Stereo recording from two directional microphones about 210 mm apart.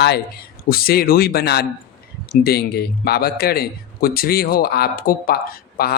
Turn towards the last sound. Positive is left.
turn(degrees=45)  # may be behind; listen again after turning